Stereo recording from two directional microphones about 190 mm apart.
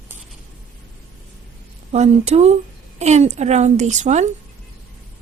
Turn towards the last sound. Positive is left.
turn(degrees=-40)  # may be behind; listen again after turning